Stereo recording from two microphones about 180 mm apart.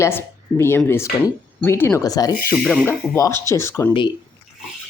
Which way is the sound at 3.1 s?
15° left (ahead or behind).